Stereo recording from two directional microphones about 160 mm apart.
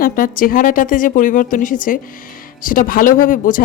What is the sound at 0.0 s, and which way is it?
A woman's voice, 60° left (ahead or behind).